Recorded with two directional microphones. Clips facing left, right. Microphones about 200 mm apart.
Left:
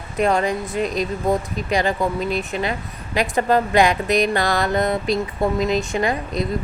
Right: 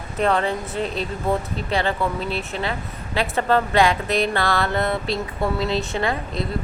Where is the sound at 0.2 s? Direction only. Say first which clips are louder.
Left 2 dB; 10° left (ahead or behind).